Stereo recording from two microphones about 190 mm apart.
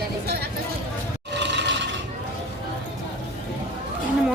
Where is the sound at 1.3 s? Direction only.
65° right (ahead or behind).